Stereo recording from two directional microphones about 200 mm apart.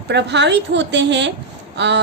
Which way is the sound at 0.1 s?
60° right (ahead or behind).